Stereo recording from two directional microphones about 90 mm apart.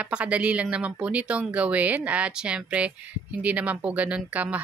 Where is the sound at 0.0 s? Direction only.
15° right (ahead or behind).